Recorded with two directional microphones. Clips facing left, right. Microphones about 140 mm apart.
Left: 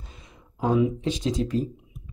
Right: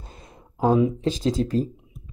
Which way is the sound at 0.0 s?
40° right (ahead or behind).